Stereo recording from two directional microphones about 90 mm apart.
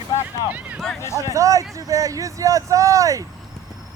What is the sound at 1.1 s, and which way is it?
Speech, 35° right (ahead or behind).